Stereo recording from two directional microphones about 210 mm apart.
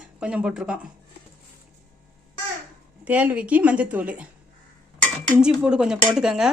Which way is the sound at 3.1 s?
5° right (ahead or behind).